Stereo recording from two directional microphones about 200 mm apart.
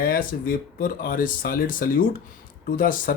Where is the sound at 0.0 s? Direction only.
45° left (ahead or behind).